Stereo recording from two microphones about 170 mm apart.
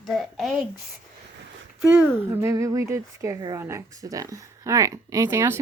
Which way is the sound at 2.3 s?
15° right (ahead or behind).